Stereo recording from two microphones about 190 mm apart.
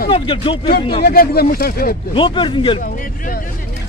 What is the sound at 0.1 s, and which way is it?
Speech, 30° left (ahead or behind).